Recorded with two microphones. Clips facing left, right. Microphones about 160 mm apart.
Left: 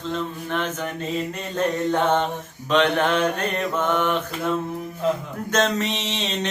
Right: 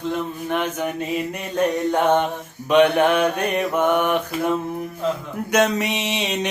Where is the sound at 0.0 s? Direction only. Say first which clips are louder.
Right 3 dB; 15° right (ahead or behind).